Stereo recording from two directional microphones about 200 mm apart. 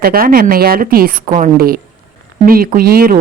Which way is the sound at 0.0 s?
50° right (ahead or behind).